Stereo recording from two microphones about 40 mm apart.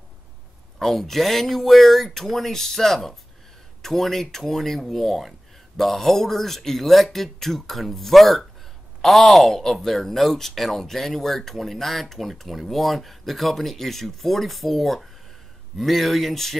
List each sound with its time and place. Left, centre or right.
0.7 s speech: centre